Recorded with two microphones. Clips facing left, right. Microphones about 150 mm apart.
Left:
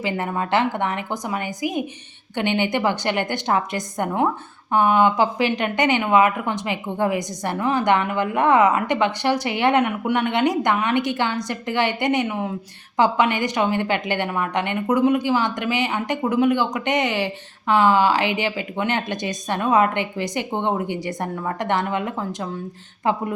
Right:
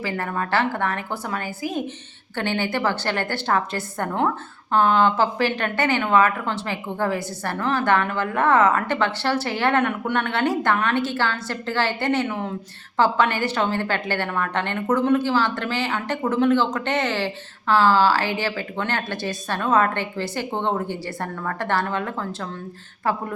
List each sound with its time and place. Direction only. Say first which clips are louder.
0.0 s a woman's voice: left 2 dB; 20° left (ahead or behind)